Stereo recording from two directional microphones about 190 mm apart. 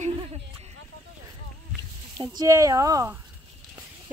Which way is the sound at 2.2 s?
20° right (ahead or behind).